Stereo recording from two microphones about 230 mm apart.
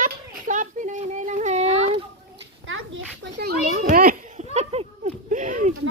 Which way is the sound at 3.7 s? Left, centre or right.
Right.